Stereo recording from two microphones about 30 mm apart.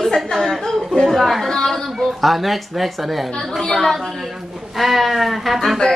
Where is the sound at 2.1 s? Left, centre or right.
Centre.